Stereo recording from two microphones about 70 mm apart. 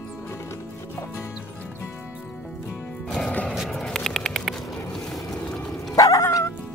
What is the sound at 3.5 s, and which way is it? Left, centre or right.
Vehicle, centre.